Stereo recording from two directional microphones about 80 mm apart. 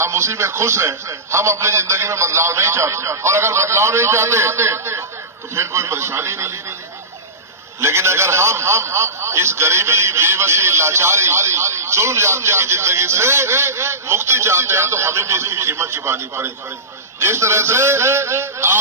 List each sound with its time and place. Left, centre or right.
0.0 s a man's voice: right
7.8 s a man's voice: right